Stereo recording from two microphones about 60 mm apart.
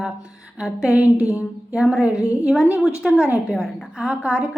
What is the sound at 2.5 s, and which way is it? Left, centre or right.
Speech, centre.